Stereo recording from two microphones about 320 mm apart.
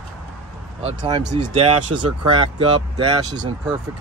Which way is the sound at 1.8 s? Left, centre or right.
Right.